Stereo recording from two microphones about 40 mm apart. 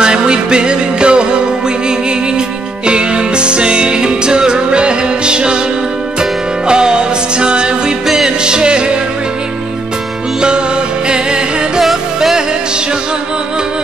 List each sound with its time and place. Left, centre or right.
0.0 s music: right
2.9 s music: right
6.7 s music: right
11.8 s music: centre